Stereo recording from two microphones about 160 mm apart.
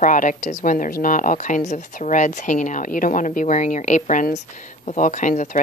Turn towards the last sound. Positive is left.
turn(degrees=50)  # may be behind; listen again after turning